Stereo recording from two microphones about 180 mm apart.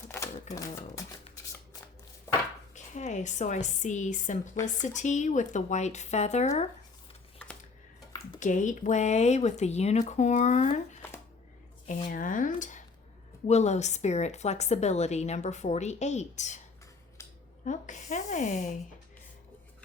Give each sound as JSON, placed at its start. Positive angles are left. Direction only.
{"t": 0.5, "sound": "speech", "side_deg": 20}
{"t": 2.7, "sound": "a woman's voice", "side_deg": 40}
{"t": 8.4, "sound": "a woman's voice", "side_deg": 45}
{"t": 11.9, "sound": "a woman's voice", "side_deg": 40}
{"t": 17.2, "sound": "scissors", "side_deg": 15}
{"t": 17.7, "sound": "speech", "side_deg": 45}